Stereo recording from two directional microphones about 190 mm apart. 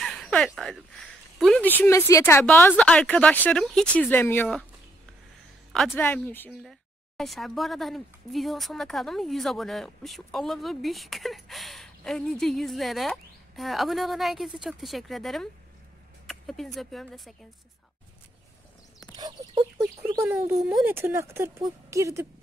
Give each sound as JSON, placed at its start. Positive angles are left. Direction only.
{"t": 0.0, "sound": "a sound", "side_deg": 5}
{"t": 0.6, "sound": "speech", "side_deg": 0}
{"t": 5.7, "sound": "a woman's voice", "side_deg": 0}
{"t": 19.1, "sound": "speech", "side_deg": -20}